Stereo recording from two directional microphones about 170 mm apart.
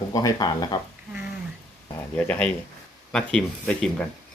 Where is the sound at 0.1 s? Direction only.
20° left (ahead or behind).